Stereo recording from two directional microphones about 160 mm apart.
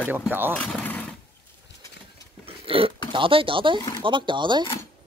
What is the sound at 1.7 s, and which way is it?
Pigeon, 90° left.